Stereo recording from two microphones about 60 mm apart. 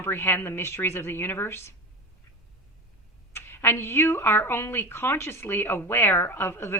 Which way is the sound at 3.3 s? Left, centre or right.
Left.